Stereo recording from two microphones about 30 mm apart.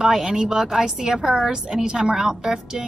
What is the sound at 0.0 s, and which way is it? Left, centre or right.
A woman's voice, centre.